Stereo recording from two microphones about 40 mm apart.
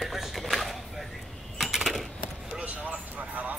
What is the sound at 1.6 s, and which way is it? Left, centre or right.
Coin, centre.